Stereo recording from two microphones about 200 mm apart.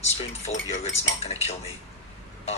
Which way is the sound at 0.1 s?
30° left (ahead or behind).